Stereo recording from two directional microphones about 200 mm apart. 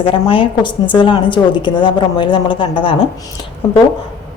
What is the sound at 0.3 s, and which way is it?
A woman's voice, 25° left (ahead or behind).